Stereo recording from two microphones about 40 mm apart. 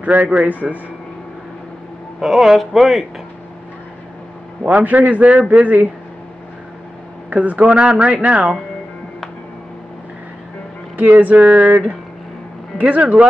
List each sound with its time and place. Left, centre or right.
0.0 s a man's voice: right
2.1 s speech: centre
4.8 s speech: right
7.2 s speech: right
7.6 s speech: right
11.0 s speech: right
12.7 s speech: right